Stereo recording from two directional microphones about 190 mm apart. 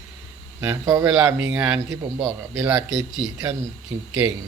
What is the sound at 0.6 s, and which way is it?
A man's voice, 15° right (ahead or behind).